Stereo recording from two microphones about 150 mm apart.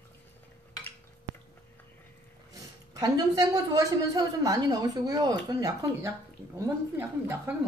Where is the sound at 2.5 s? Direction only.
25° right (ahead or behind).